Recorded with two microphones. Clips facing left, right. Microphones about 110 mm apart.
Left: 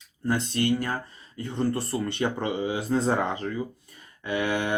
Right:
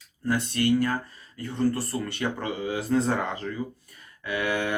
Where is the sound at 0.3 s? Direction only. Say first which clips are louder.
Right 1 dB; 25° left (ahead or behind).